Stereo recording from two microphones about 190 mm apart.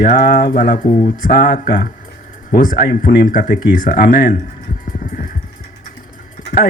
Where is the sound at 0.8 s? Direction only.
25° left (ahead or behind).